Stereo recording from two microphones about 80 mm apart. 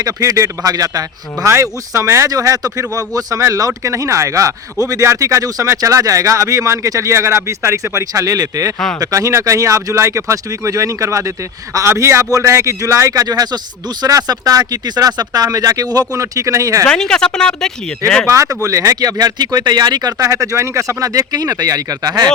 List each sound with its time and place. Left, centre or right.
0.0 s speech: right
2.0 s speech: right
2.3 s speech: right
16.8 s a woman's voice: centre
18.3 s speech: right